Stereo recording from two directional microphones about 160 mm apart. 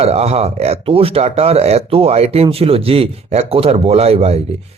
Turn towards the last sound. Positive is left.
turn(degrees=-40)  # may be behind; listen again after turning